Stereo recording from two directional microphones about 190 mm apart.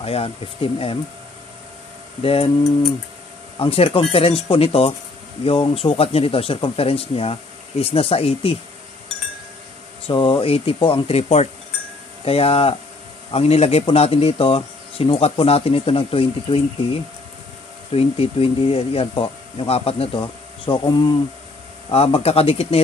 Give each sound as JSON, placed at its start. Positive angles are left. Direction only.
{"t": 0.0, "sound": "speech", "side_deg": 30}
{"t": 2.2, "sound": "speech", "side_deg": 30}
{"t": 3.5, "sound": "speech", "side_deg": 30}
{"t": 10.0, "sound": "speech", "side_deg": 30}